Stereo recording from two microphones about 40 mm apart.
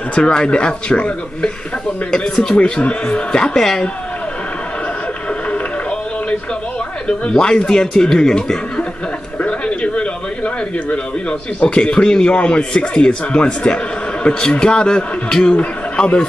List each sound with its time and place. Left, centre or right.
0.1 s speech: left
7.3 s speech: left
7.9 s speech: centre
9.4 s speech: left